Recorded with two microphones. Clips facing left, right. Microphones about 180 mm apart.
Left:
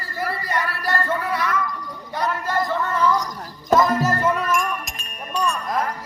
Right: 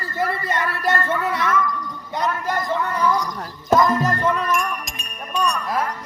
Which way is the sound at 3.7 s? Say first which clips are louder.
Even; 5° left (ahead or behind).